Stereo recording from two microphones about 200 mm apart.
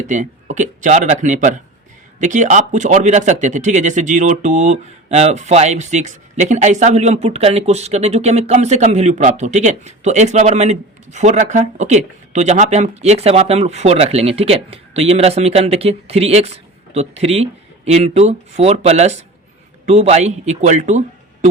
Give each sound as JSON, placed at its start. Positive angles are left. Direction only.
{"t": 0.1, "sound": "a man's voice", "side_deg": -40}